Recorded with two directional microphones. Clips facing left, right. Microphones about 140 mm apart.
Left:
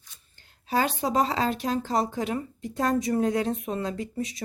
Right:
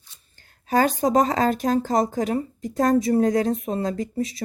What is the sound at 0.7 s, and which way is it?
Speech, 45° right (ahead or behind).